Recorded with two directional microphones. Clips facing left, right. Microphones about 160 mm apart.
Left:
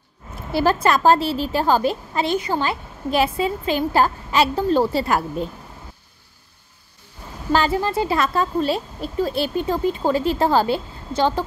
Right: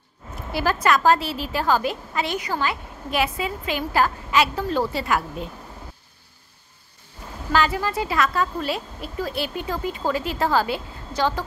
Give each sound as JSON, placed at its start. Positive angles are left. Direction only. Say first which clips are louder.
{"t": 0.5, "sound": "a woman's voice", "louder": "left 3 dB", "side_deg": 30}
{"t": 7.5, "sound": "a woman's voice", "louder": "left 3 dB", "side_deg": 30}